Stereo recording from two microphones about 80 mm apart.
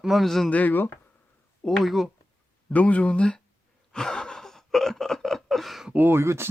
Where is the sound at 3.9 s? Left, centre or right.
Centre.